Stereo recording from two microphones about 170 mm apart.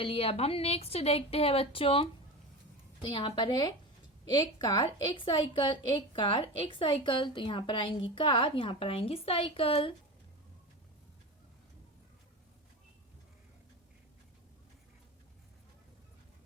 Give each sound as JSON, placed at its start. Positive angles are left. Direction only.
{"t": 0.0, "sound": "a woman's voice", "side_deg": 35}
{"t": 3.1, "sound": "a woman's voice", "side_deg": 30}